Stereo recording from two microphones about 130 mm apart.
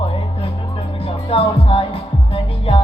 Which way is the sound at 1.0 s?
45° left (ahead or behind).